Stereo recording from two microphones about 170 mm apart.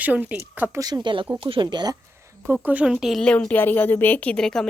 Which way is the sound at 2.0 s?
15° right (ahead or behind).